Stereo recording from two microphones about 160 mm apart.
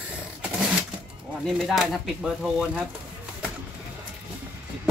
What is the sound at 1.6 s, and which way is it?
Speech, centre (ahead or behind).